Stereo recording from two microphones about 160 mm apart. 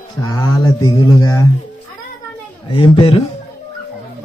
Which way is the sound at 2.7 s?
35° left (ahead or behind).